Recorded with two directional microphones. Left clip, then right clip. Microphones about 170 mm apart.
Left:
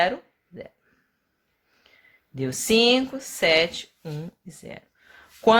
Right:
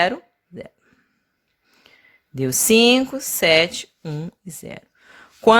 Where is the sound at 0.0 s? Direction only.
35° right (ahead or behind).